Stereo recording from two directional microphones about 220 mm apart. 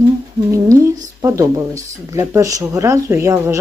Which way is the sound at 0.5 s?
15° right (ahead or behind).